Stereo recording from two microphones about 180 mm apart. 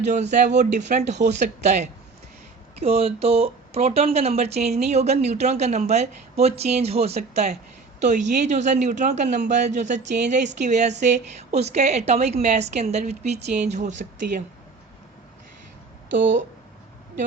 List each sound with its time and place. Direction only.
0.1 s speech: 40° right (ahead or behind)